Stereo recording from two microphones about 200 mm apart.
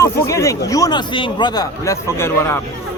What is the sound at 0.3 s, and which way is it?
A man's voice, 15° left (ahead or behind).